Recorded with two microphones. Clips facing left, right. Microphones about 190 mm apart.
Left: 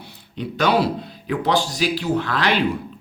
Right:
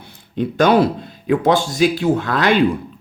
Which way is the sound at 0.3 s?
50° right (ahead or behind).